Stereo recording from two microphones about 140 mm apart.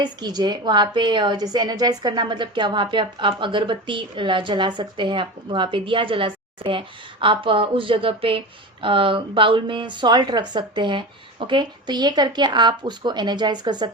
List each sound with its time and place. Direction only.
0.0 s a woman's voice: 30° right (ahead or behind)